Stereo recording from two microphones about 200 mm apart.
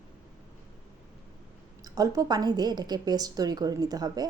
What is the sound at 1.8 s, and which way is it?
A woman's voice, 15° right (ahead or behind).